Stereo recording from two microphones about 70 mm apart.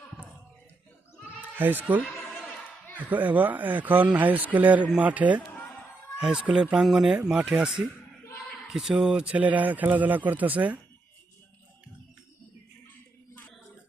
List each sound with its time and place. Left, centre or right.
1.4 s bleat: right
3.0 s speech: right
6.1 s speech: centre